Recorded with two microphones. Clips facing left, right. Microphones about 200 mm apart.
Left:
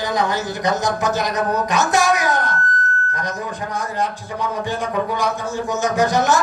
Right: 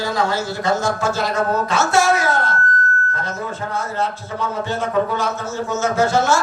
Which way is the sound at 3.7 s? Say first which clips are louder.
Even; 15° left (ahead or behind).